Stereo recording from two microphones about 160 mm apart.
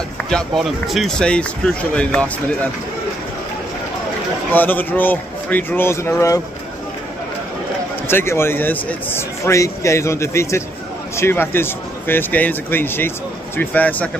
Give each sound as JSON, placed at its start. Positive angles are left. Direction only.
{"t": 0.3, "sound": "speech", "side_deg": 0}
{"t": 4.5, "sound": "a man's voice", "side_deg": 10}
{"t": 8.1, "sound": "a man's voice", "side_deg": 15}